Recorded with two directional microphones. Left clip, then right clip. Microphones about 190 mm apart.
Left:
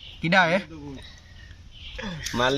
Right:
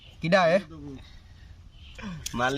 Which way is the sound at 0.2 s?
40° right (ahead or behind).